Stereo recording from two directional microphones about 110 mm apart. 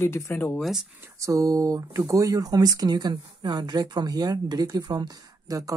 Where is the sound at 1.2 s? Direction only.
30° right (ahead or behind).